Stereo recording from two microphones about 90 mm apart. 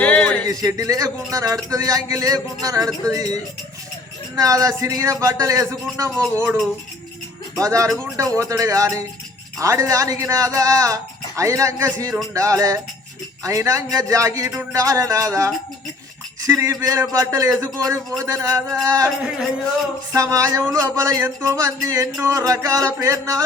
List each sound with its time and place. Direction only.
0.0 s a sound: 15° left (ahead or behind)
0.4 s speech: 40° right (ahead or behind)
6.3 s speech: 25° right (ahead or behind)
7.5 s speech: 40° right (ahead or behind)
20.1 s speech: 40° right (ahead or behind)